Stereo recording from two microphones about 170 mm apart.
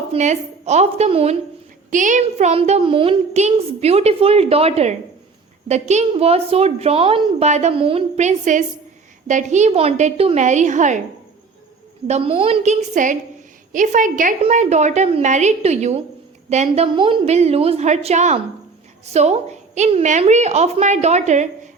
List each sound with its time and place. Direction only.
0.1 s speech: 40° right (ahead or behind)
1.9 s a woman's voice: 50° right (ahead or behind)
12.0 s a woman's voice: 40° right (ahead or behind)